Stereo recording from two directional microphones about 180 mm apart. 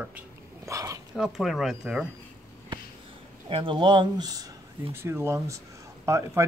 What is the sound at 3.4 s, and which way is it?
A man's voice, 30° right (ahead or behind).